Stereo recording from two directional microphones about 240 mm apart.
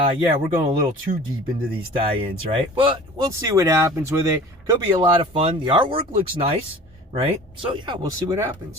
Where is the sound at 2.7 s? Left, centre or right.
Right.